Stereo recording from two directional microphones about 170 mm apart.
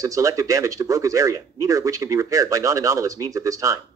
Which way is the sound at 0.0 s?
20° right (ahead or behind).